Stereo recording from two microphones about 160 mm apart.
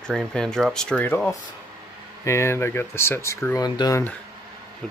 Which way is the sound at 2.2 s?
15° left (ahead or behind).